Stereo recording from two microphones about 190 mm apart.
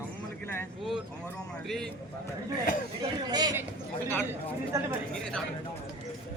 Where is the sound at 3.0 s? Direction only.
20° right (ahead or behind).